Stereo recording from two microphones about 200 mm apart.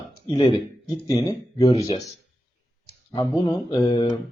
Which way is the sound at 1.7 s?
30° left (ahead or behind).